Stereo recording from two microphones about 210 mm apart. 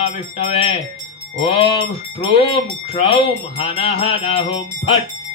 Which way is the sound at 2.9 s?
25° left (ahead or behind).